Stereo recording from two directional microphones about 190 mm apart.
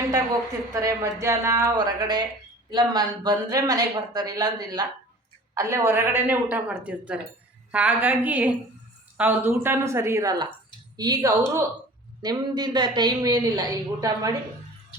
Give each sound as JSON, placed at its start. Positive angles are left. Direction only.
{"t": 0.7, "sound": "a woman's voice", "side_deg": -15}